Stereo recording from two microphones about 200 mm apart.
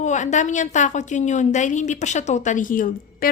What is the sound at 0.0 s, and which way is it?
A woman's voice, 35° left (ahead or behind).